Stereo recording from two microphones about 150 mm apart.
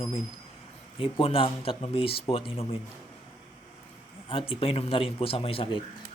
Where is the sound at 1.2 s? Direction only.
40° left (ahead or behind).